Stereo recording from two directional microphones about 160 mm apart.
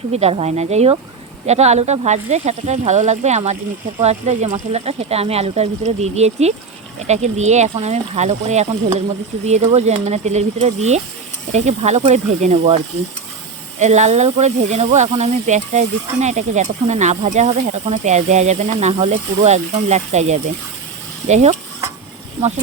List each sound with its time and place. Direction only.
0.1 s speech: 40° right (ahead or behind)